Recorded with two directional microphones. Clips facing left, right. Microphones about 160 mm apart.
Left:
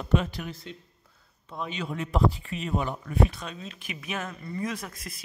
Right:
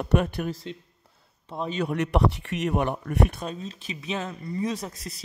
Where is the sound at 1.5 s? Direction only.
30° right (ahead or behind).